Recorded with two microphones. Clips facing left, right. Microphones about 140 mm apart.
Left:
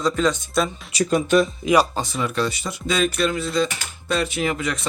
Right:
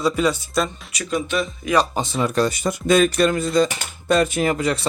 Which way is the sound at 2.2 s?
40° right (ahead or behind).